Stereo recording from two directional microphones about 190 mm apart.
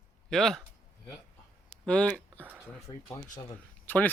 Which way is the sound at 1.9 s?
5° left (ahead or behind).